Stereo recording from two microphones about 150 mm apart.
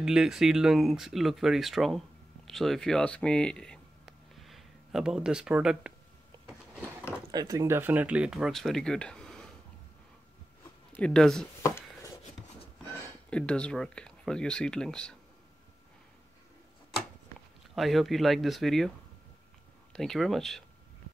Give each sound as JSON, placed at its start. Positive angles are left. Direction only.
{"t": 0.0, "sound": "speech", "side_deg": -5}
{"t": 7.2, "sound": "speech", "side_deg": -25}
{"t": 11.0, "sound": "speech", "side_deg": 5}
{"t": 11.6, "sound": "chopping", "side_deg": 20}
{"t": 13.3, "sound": "speech", "side_deg": 5}
{"t": 17.7, "sound": "speech", "side_deg": 0}
{"t": 19.9, "sound": "speech", "side_deg": 0}